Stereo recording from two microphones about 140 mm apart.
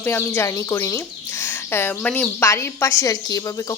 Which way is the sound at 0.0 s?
15° left (ahead or behind).